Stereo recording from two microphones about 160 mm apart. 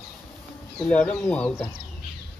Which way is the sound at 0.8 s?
10° left (ahead or behind).